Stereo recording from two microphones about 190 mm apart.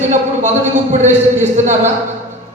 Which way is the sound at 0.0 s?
40° right (ahead or behind).